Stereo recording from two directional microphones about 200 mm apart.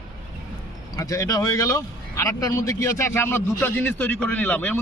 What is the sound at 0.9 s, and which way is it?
Speech, 15° left (ahead or behind).